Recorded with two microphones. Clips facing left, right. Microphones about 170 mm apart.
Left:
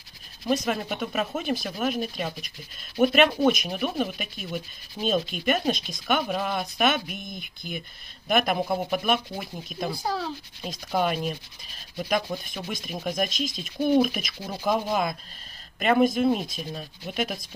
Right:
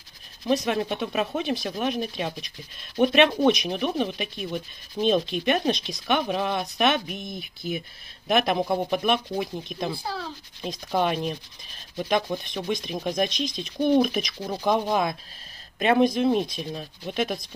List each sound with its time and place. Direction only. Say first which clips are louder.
0.5 s speech: right 2 dB; centre (ahead or behind)
9.9 s speech: left 4 dB; 40° left (ahead or behind)
10.6 s speech: right 1 dB; 5° left (ahead or behind)